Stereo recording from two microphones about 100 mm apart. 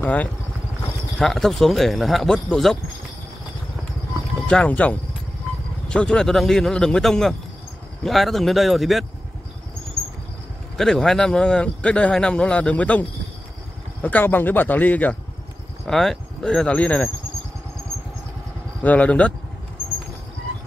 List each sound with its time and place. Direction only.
0.0 s speech: 15° left (ahead or behind)
1.1 s speech: 5° left (ahead or behind)
4.5 s speech: 10° left (ahead or behind)
10.8 s speech: 5° left (ahead or behind)
14.0 s speech: 20° left (ahead or behind)
15.9 s speech: 5° left (ahead or behind)
18.8 s speech: 15° left (ahead or behind)